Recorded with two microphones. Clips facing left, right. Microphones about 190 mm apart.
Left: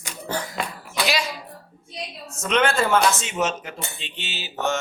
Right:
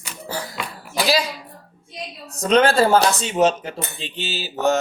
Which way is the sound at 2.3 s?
35° right (ahead or behind).